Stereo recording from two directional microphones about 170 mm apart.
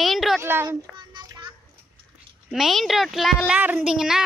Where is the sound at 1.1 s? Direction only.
25° right (ahead or behind).